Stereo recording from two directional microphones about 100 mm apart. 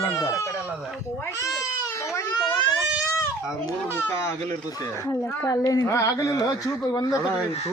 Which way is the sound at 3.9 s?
25° left (ahead or behind).